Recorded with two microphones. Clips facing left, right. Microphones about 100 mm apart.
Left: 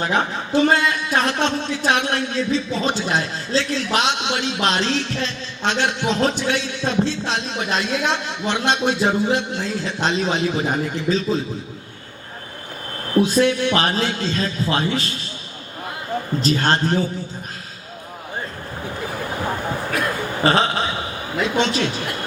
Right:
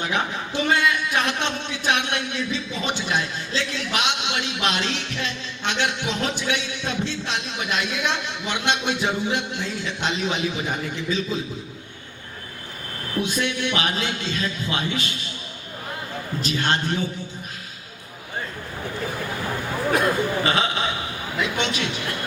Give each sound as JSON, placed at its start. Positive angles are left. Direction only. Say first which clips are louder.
{"t": 0.0, "sound": "a man's voice", "louder": "left 4 dB", "side_deg": 35}
{"t": 13.1, "sound": "a man's voice", "louder": "left 9 dB", "side_deg": 35}
{"t": 16.4, "sound": "a man's voice", "louder": "left 4 dB", "side_deg": 35}
{"t": 20.4, "sound": "a man's voice", "louder": "left 4 dB", "side_deg": 40}